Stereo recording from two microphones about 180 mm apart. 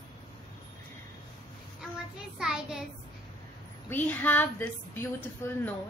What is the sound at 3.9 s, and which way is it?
A woman's voice, 10° left (ahead or behind).